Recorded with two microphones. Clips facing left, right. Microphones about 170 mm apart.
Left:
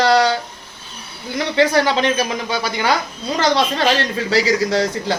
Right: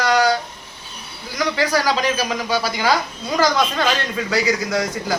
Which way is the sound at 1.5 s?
25° left (ahead or behind).